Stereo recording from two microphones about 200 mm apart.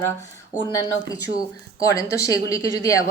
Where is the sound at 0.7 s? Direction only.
15° left (ahead or behind).